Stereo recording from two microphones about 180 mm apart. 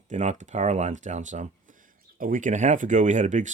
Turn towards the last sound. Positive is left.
turn(degrees=-40)  # may be behind; listen again after turning